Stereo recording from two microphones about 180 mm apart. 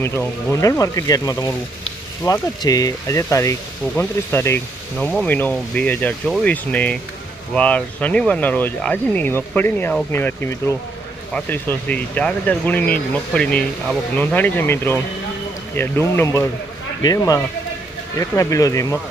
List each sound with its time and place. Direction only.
0.0 s speech: 15° left (ahead or behind)